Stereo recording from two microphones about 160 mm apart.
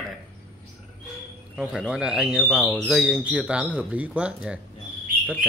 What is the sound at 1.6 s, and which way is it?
Speech, 5° right (ahead or behind).